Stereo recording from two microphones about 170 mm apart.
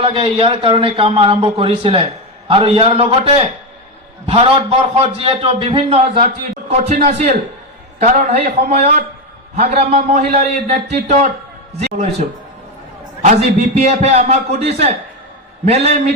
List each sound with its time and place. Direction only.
0.0 s speech: 30° right (ahead or behind)